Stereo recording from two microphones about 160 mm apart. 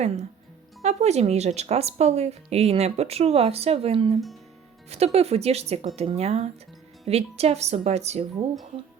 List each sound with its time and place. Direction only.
0.8 s speech: 45° right (ahead or behind)